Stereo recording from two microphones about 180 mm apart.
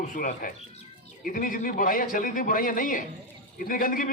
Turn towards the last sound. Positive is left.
turn(degrees=50)  # may be behind; listen again after turning